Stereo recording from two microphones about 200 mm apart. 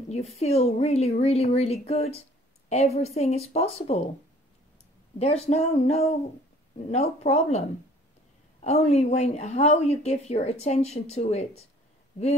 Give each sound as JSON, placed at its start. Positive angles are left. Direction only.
{"t": 0.4, "sound": "speech", "side_deg": 30}
{"t": 5.2, "sound": "speech", "side_deg": 30}